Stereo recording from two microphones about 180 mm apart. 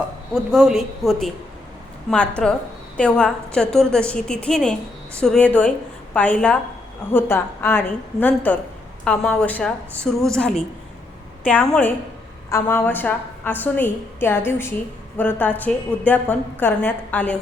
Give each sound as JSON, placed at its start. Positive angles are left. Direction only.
{"t": 0.3, "sound": "a woman's voice", "side_deg": 0}